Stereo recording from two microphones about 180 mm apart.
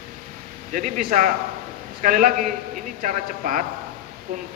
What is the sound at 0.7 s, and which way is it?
A man's voice, 45° right (ahead or behind).